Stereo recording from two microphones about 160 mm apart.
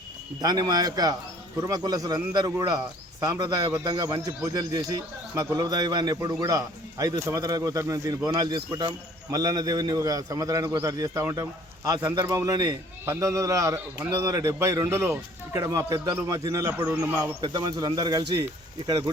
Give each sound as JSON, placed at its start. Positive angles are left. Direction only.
{"t": 0.4, "sound": "a man's voice", "side_deg": -25}